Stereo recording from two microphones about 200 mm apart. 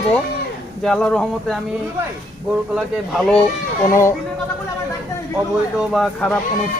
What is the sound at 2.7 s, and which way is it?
Speech, 5° right (ahead or behind).